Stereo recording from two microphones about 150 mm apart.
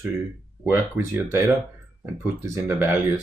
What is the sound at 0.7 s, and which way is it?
Speech, 15° right (ahead or behind).